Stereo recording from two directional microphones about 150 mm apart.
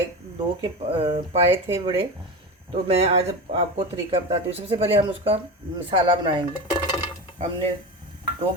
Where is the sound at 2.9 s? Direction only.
40° right (ahead or behind).